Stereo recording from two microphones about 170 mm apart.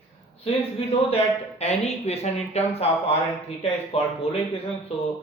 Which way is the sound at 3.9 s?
35° left (ahead or behind).